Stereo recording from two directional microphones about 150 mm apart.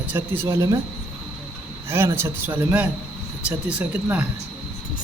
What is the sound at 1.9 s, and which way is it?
A man's voice, 15° right (ahead or behind).